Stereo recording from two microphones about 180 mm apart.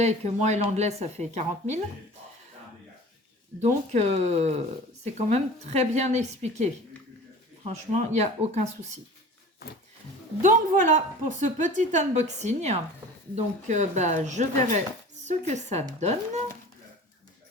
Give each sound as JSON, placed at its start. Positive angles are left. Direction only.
{"t": 0.0, "sound": "speech", "side_deg": -40}
{"t": 3.6, "sound": "speech", "side_deg": -40}
{"t": 7.9, "sound": "speech", "side_deg": -40}
{"t": 10.4, "sound": "a woman's voice", "side_deg": -50}